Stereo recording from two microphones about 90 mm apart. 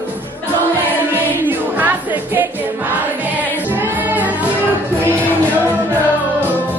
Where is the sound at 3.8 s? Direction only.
20° right (ahead or behind).